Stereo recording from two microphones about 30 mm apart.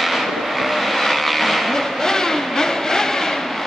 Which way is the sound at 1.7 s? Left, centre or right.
Centre.